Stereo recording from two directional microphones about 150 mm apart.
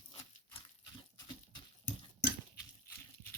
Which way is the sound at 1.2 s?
30° left (ahead or behind).